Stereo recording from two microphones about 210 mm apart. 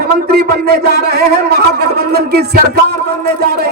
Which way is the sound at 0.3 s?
50° right (ahead or behind).